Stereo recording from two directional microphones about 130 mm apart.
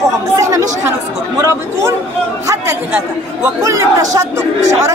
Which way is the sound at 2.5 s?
20° right (ahead or behind).